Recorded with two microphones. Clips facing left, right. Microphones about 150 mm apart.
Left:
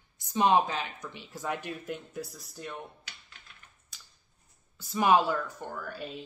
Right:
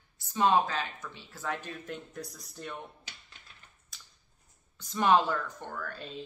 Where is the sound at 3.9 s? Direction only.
Centre (ahead or behind).